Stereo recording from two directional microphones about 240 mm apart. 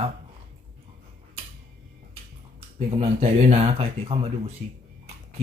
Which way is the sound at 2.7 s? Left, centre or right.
Right.